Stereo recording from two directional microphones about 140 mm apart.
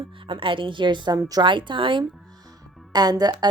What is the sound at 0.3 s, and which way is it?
Speech, 35° right (ahead or behind).